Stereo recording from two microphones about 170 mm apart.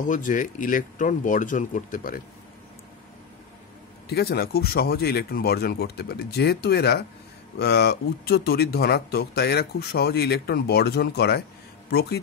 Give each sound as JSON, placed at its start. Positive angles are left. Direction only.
{"t": 0.0, "sound": "speech", "side_deg": 50}
{"t": 4.1, "sound": "speech", "side_deg": 65}